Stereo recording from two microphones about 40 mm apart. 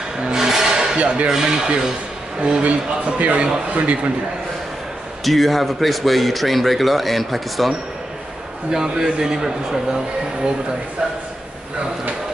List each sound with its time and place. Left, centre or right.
0.2 s a sound: centre
0.9 s speech: right
1.3 s a man's voice: centre
2.6 s a man's voice: right
5.2 s speech: centre
8.7 s a man's voice: centre